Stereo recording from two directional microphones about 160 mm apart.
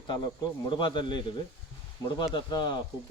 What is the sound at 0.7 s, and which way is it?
Speech, 30° left (ahead or behind).